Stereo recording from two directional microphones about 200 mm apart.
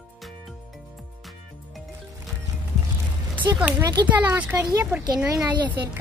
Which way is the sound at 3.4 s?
5° right (ahead or behind).